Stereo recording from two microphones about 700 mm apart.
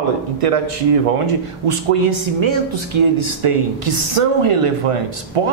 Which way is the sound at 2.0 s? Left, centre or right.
Right.